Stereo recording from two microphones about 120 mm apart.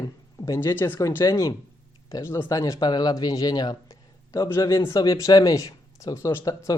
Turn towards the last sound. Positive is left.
turn(degrees=25)  # may be behind; listen again after turning